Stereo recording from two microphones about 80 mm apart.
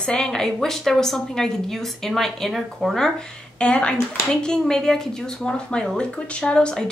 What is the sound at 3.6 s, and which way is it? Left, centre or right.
A woman's voice, centre.